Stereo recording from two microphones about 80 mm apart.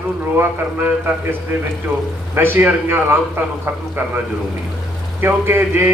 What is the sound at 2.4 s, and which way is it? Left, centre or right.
A man's voice, right.